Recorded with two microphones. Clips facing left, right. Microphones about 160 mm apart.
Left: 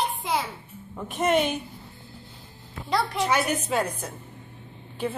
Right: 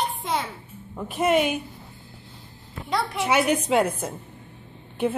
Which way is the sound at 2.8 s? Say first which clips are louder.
Left 1 dB; centre (ahead or behind).